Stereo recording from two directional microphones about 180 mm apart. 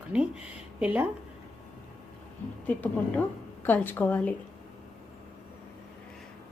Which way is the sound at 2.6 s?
10° left (ahead or behind).